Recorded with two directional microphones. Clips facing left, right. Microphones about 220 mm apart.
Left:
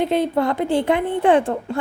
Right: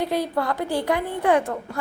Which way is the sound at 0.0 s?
25° left (ahead or behind).